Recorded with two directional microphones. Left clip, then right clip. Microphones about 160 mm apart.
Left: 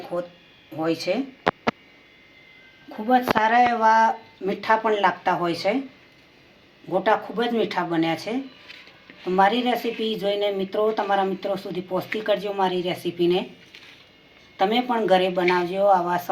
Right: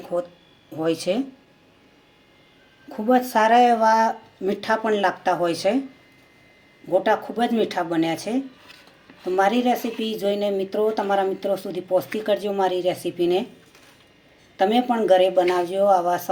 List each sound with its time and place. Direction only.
0.8 s speech: 55° right (ahead or behind)
2.9 s speech: 45° right (ahead or behind)
7.0 s speech: 65° right (ahead or behind)
9.3 s speech: 65° right (ahead or behind)
14.5 s speech: 65° right (ahead or behind)